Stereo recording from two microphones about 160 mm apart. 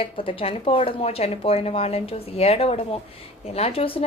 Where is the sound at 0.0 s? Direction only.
35° left (ahead or behind).